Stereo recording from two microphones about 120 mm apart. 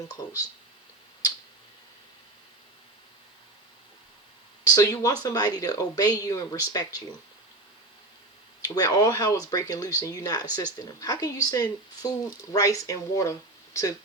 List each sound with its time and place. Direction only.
4.6 s speech: 30° left (ahead or behind)
8.6 s speech: 35° left (ahead or behind)